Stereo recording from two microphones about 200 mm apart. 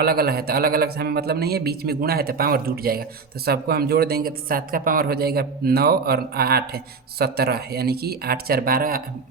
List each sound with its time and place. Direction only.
0.0 s speech: 50° right (ahead or behind)